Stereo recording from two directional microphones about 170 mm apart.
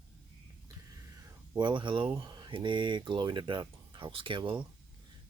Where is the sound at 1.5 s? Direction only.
25° right (ahead or behind).